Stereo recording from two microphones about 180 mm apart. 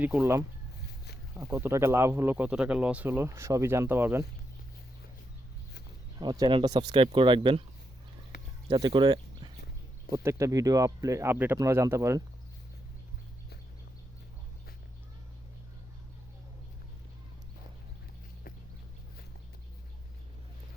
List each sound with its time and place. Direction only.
0.0 s speech: 10° right (ahead or behind)
6.1 s speech: 20° right (ahead or behind)
8.7 s speech: 25° right (ahead or behind)